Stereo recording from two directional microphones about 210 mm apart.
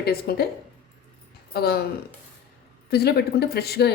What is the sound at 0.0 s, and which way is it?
Speech, 50° left (ahead or behind).